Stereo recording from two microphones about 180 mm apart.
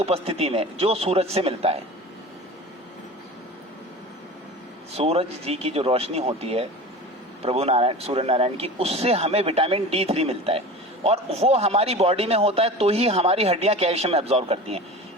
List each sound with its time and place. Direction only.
0.0 s a man's voice: 35° right (ahead or behind)
4.9 s a man's voice: 35° right (ahead or behind)